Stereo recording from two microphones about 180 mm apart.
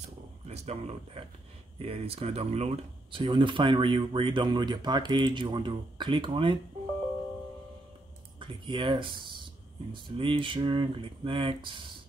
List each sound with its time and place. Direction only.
0.5 s speech: 35° right (ahead or behind)
8.4 s speech: 25° right (ahead or behind)